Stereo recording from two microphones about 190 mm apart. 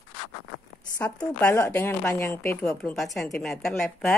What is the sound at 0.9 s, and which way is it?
Speech, 15° left (ahead or behind).